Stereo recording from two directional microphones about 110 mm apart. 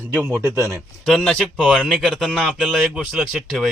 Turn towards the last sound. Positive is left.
turn(degrees=-5)  # may be behind; listen again after turning